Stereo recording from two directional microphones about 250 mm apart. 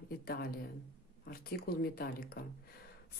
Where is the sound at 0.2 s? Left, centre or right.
Left.